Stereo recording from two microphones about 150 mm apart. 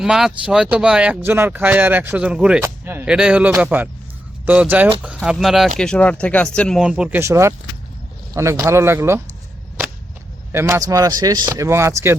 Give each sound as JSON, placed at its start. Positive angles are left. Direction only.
{"t": 0.0, "sound": "speech", "side_deg": -5}
{"t": 2.6, "sound": "a sound", "side_deg": -15}
{"t": 3.2, "sound": "speech", "side_deg": -5}
{"t": 6.7, "sound": "speech", "side_deg": -5}
{"t": 10.5, "sound": "speech", "side_deg": -15}